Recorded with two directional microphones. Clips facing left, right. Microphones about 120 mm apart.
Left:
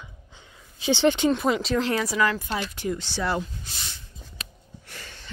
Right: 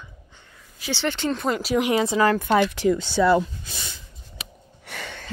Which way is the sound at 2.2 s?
55° right (ahead or behind).